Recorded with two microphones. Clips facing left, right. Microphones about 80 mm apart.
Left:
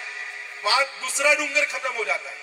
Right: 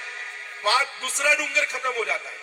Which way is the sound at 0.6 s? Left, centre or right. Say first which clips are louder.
Even; right.